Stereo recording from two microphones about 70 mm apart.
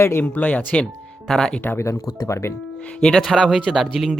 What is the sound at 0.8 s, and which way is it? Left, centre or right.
Music, centre.